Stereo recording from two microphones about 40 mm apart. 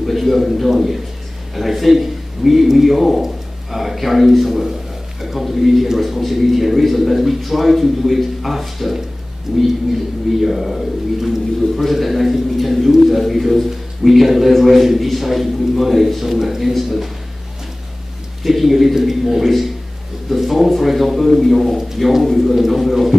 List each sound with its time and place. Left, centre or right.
0.0 s a man's voice: centre
18.4 s a man's voice: centre